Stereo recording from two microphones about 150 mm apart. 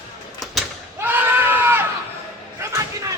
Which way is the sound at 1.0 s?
15° right (ahead or behind).